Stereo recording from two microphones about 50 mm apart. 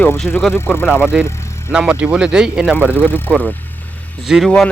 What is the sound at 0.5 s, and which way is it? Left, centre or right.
Speech, left.